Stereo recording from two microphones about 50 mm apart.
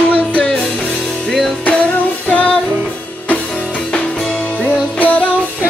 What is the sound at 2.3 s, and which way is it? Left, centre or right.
Music, left.